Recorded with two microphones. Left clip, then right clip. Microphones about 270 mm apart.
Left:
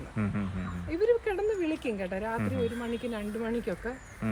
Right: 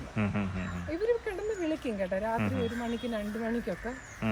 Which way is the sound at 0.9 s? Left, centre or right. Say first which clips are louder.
Left 4 dB; centre.